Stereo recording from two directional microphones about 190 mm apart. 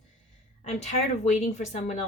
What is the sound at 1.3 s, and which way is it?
Speech, 40° left (ahead or behind).